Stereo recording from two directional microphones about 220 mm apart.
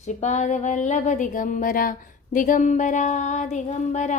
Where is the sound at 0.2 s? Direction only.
30° left (ahead or behind).